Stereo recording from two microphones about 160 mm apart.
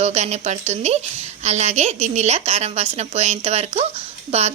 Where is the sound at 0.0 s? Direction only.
45° right (ahead or behind).